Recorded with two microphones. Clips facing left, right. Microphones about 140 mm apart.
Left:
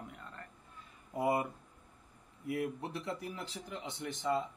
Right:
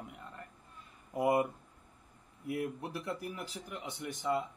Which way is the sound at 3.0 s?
25° left (ahead or behind).